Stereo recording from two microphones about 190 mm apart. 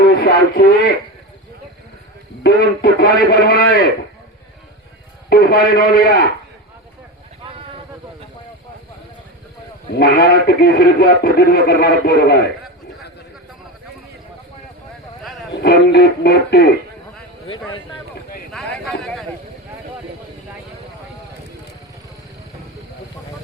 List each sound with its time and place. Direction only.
0.2 s speech: 55° left (ahead or behind)
2.4 s speech: 55° left (ahead or behind)
5.3 s a man's voice: 55° left (ahead or behind)
9.9 s speech: 55° left (ahead or behind)
15.2 s a sound: centre (ahead or behind)
15.5 s speech: 65° left (ahead or behind)
18.5 s speech: centre (ahead or behind)